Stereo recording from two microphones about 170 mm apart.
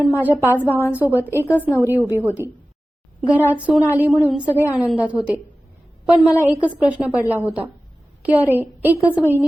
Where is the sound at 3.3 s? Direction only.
10° right (ahead or behind).